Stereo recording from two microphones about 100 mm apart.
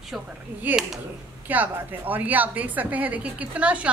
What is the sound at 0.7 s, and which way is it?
A woman's voice, 15° right (ahead or behind).